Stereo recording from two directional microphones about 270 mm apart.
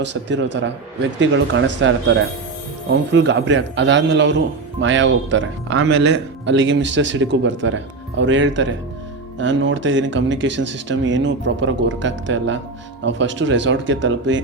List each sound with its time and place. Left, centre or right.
0.0 s a man's voice: right